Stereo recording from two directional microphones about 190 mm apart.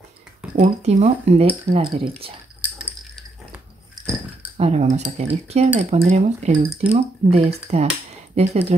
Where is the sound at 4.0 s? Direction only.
20° right (ahead or behind).